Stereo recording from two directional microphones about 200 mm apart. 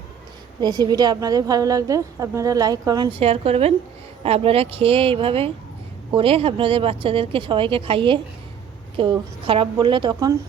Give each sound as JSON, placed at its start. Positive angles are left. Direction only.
{"t": 0.6, "sound": "a woman's voice", "side_deg": -20}